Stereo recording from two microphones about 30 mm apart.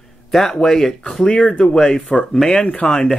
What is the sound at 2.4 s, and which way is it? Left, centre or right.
Speech, left.